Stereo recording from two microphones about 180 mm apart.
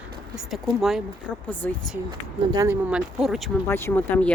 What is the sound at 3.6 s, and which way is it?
Speech, 15° left (ahead or behind).